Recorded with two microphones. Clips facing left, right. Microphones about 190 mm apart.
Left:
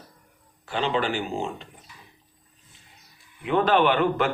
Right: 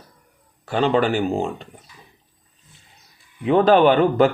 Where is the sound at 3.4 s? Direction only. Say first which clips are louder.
Right 6 dB; 40° right (ahead or behind).